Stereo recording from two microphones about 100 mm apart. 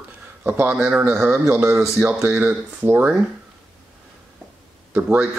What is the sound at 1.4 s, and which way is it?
Speech, 25° right (ahead or behind).